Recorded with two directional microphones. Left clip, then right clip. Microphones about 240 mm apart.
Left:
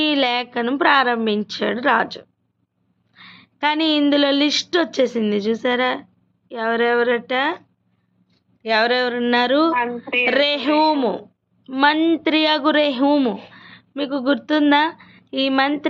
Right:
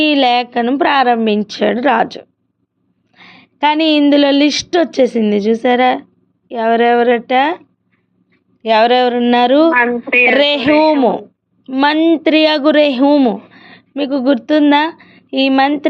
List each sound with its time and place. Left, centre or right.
0.0 s speech: right
8.6 s speech: right